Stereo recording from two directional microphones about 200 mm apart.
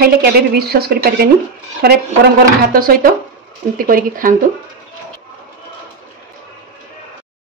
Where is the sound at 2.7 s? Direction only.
45° right (ahead or behind).